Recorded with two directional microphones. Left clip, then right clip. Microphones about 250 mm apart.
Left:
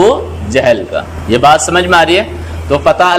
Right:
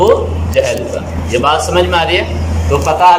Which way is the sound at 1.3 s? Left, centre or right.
Left.